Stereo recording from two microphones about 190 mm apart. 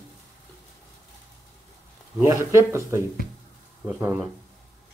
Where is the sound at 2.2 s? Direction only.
15° right (ahead or behind).